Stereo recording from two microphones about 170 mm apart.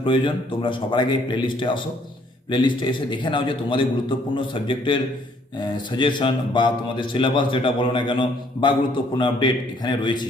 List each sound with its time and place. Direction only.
0.0 s a man's voice: 30° left (ahead or behind)